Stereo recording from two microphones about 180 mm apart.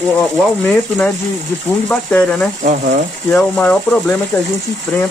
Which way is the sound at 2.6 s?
40° right (ahead or behind).